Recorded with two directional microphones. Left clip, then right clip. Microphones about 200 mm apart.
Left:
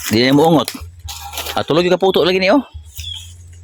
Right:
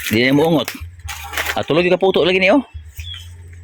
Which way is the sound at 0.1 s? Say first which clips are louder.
Left 3 dB; 20° left (ahead or behind).